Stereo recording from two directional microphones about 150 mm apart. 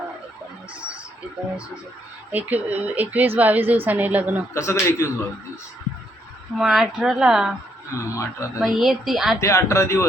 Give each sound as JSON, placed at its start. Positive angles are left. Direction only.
{"t": 2.3, "sound": "a woman's voice", "side_deg": -10}
{"t": 4.5, "sound": "a man's voice", "side_deg": 20}
{"t": 6.6, "sound": "speech", "side_deg": 0}
{"t": 7.9, "sound": "a man's voice", "side_deg": 20}
{"t": 8.5, "sound": "speech", "side_deg": 0}
{"t": 9.4, "sound": "a man's voice", "side_deg": 20}